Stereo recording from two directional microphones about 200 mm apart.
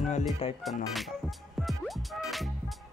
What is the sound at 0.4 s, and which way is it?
Music, 30° left (ahead or behind).